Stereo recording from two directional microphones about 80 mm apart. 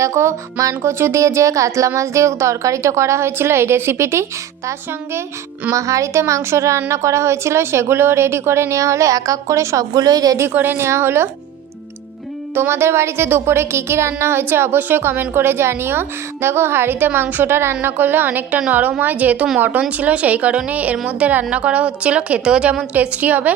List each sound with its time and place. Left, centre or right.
0.0 s speech: right
9.9 s a woman's voice: right
10.5 s speech: right
12.5 s a woman's voice: right